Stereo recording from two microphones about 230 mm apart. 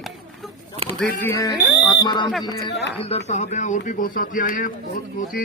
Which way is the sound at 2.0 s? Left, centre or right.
Centre.